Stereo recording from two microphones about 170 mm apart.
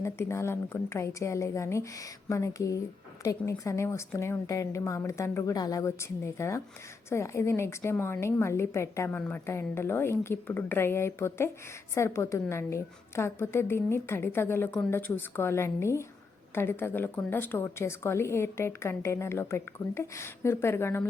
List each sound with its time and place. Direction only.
0.0 s a woman's voice: 15° left (ahead or behind)